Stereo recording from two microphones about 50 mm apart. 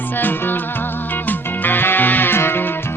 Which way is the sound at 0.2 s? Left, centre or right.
Left.